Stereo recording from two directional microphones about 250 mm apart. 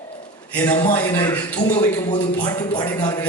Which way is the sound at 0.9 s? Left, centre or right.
Centre.